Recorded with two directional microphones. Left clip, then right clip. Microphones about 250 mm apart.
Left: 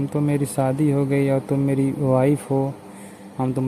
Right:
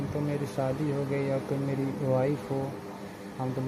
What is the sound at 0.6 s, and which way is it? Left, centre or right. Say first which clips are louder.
Speech: left 8 dB; left.